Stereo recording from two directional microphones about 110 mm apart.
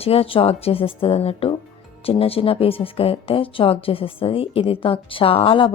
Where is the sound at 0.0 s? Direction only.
60° left (ahead or behind).